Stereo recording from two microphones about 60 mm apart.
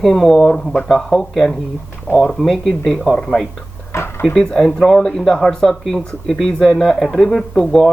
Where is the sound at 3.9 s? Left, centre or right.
Left.